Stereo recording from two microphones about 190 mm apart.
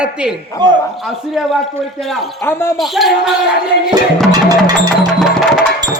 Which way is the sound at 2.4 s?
10° left (ahead or behind).